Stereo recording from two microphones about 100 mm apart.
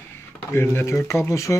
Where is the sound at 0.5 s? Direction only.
25° left (ahead or behind).